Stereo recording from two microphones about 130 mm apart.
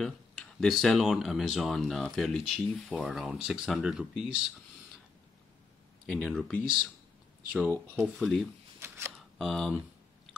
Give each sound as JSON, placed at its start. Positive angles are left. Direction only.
{"t": 0.0, "sound": "speech", "side_deg": 5}
{"t": 6.0, "sound": "speech", "side_deg": 10}
{"t": 8.0, "sound": "speech", "side_deg": 0}
{"t": 8.7, "sound": "shuffling cards", "side_deg": -20}
{"t": 9.4, "sound": "speech", "side_deg": 0}